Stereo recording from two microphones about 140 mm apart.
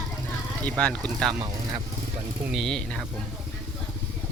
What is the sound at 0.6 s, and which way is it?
Speech, 10° left (ahead or behind).